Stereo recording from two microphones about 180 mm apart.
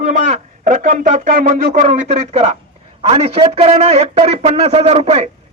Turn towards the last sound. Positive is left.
turn(degrees=-35)  # may be behind; listen again after turning